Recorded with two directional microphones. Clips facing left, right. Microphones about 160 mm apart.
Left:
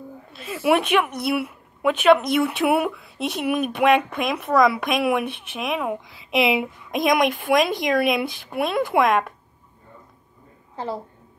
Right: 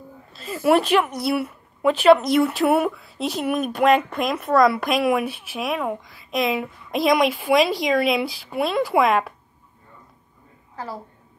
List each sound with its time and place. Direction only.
0.4 s a woman's voice: 5° left (ahead or behind)
3.2 s speech: 60° left (ahead or behind)
3.4 s speech: 5° left (ahead or behind)
6.4 s a woman's voice: 15° left (ahead or behind)
6.9 s speech: centre (ahead or behind)
10.8 s a woman's voice: 25° left (ahead or behind)